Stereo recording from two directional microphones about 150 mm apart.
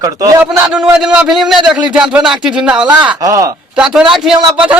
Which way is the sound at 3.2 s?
25° right (ahead or behind).